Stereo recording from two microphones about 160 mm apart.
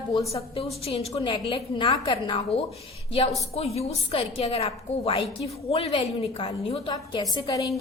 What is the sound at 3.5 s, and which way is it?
A woman's voice, 40° left (ahead or behind).